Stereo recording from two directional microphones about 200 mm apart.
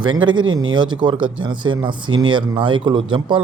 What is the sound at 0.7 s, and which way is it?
Speech, 25° right (ahead or behind).